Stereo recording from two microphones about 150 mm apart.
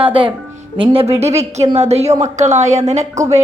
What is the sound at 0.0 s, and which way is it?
A woman's voice, 35° right (ahead or behind).